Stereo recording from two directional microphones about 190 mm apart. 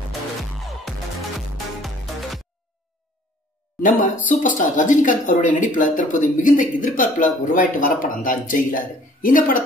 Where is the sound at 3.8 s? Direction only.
40° left (ahead or behind).